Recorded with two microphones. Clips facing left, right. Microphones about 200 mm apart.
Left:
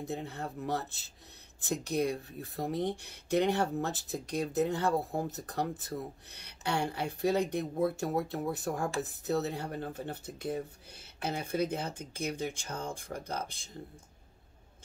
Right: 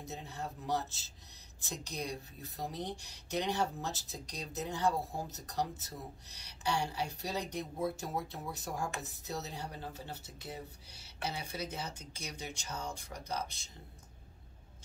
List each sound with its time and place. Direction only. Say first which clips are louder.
0.0 s speech: left 6 dB; 55° left (ahead or behind)